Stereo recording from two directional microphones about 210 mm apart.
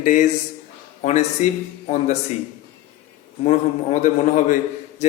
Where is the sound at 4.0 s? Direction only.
35° left (ahead or behind).